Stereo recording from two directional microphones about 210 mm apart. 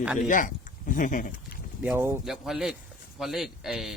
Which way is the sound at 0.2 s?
40° left (ahead or behind).